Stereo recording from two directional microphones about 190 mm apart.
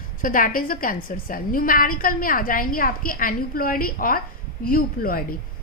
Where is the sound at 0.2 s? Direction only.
45° left (ahead or behind).